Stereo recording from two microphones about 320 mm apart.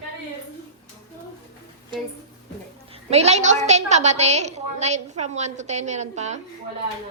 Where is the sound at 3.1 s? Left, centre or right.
Centre.